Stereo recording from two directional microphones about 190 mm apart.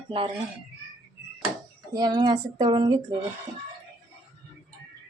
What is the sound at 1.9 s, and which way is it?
Speech, 20° right (ahead or behind).